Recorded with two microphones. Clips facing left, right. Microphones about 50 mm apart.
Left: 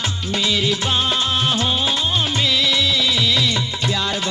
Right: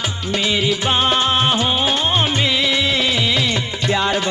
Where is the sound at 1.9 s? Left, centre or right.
Right.